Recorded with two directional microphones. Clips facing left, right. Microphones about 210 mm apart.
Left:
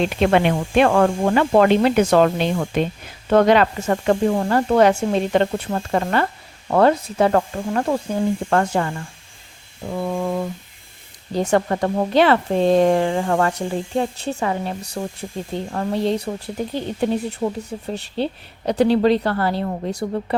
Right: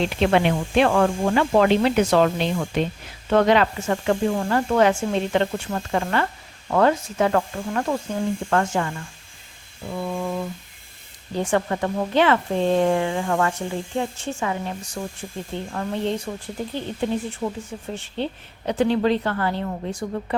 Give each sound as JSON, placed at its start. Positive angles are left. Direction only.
{"t": 0.2, "sound": "speech", "side_deg": 50}
{"t": 9.9, "sound": "speech", "side_deg": 50}